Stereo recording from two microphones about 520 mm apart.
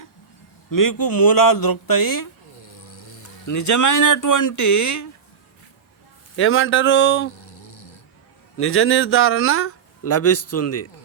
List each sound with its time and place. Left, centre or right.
0.7 s speech: left
2.8 s insect: left
3.4 s speech: left
6.3 s speech: left
7.3 s a sound: left
8.5 s speech: left